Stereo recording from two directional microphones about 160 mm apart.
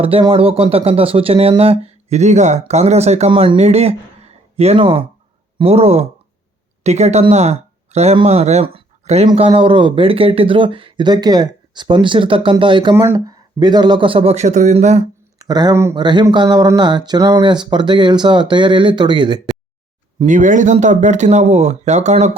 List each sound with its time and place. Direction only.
0.0 s speech: 35° right (ahead or behind)
12.9 s speech: 15° right (ahead or behind); by 15.0 s 45° right (ahead or behind)
15.4 s speech: 25° right (ahead or behind)
16.0 s speech: 30° right (ahead or behind)
20.2 s speech: 50° right (ahead or behind)